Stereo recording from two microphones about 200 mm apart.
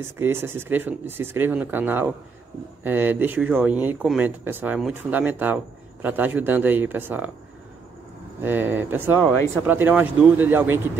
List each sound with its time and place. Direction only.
0.0 s speech: 10° right (ahead or behind)
8.4 s speech: 10° right (ahead or behind)